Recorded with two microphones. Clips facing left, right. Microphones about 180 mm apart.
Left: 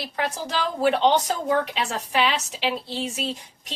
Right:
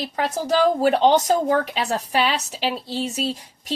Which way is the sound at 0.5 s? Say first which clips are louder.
Right 5 dB; 40° right (ahead or behind).